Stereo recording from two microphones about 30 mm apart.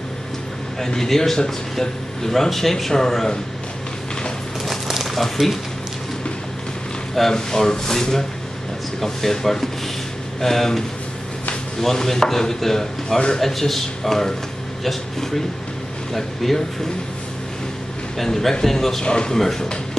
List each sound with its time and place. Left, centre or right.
0.7 s speech: centre
5.0 s speech: centre
7.3 s speech: left
11.8 s speech: centre
16.1 s speech: centre
18.1 s speech: centre
19.0 s speech: left
19.3 s speech: centre